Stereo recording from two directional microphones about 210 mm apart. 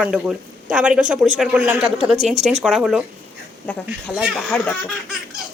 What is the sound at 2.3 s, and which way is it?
Speech, 30° right (ahead or behind).